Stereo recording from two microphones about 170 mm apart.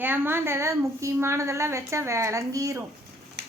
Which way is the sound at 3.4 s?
80° right.